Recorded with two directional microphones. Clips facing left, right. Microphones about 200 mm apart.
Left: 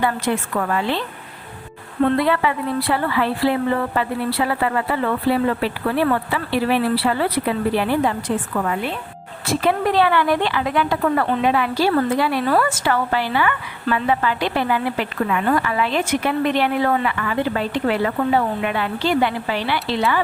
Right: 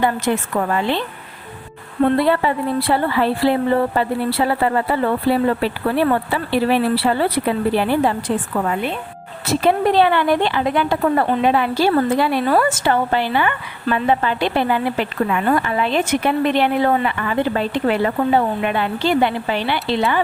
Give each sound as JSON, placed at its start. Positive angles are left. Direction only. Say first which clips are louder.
{"t": 0.0, "sound": "speech", "louder": "right 2 dB", "side_deg": -25}
{"t": 2.1, "sound": "a woman's voice", "louder": "right 2 dB", "side_deg": -30}